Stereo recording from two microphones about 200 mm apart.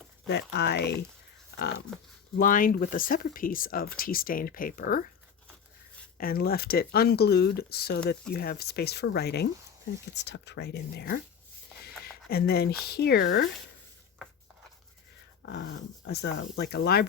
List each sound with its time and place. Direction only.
0.3 s speech: 55° left (ahead or behind)
2.4 s speech: 45° left (ahead or behind)
6.1 s speech: 50° left (ahead or behind); by 13.5 s 65° left (ahead or behind)
15.4 s speech: 60° left (ahead or behind)